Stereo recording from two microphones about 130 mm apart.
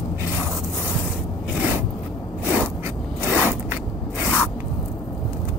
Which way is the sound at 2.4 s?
15° right (ahead or behind).